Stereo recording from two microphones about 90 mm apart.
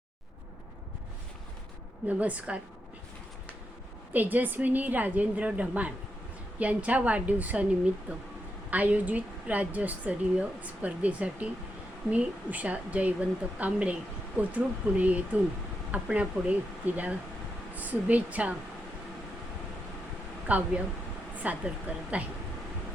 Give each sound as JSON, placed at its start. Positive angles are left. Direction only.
{"t": 2.0, "sound": "speech", "side_deg": -15}
{"t": 4.1, "sound": "a woman's voice", "side_deg": -20}
{"t": 20.5, "sound": "speech", "side_deg": -15}